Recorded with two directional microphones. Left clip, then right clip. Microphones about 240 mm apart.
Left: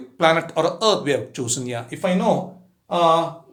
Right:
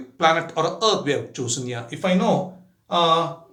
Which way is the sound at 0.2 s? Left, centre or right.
Left.